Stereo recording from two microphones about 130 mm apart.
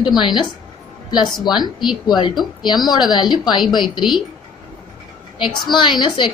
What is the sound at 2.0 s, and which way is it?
Speech, 35° left (ahead or behind).